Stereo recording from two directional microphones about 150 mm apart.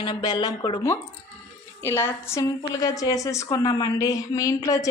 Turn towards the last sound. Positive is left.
turn(degrees=20)  # may be behind; listen again after turning